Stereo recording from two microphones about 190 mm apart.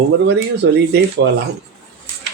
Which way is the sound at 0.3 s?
60° right (ahead or behind).